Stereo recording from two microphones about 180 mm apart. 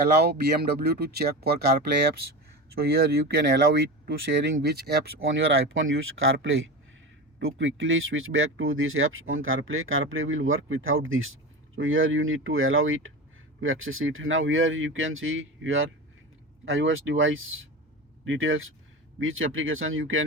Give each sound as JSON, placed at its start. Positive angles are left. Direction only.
{"t": 0.2, "sound": "speech", "side_deg": -60}
{"t": 4.6, "sound": "speech", "side_deg": -65}